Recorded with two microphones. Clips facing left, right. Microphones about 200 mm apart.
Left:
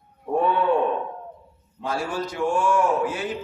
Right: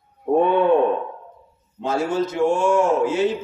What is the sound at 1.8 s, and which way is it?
A man's voice, 25° right (ahead or behind).